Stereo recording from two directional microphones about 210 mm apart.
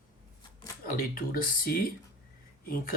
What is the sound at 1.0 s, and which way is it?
Speech, 45° left (ahead or behind).